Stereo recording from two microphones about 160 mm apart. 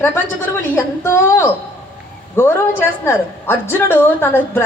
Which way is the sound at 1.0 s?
15° left (ahead or behind).